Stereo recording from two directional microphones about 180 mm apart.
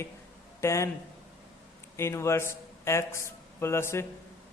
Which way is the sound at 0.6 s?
15° left (ahead or behind).